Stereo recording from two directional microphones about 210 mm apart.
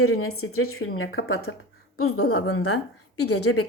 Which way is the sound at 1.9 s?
90° left.